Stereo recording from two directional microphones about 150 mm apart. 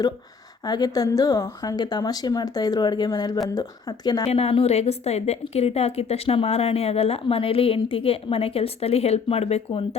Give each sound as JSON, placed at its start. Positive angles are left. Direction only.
{"t": 0.6, "sound": "a woman's voice", "side_deg": 25}
{"t": 4.3, "sound": "a woman's voice", "side_deg": 40}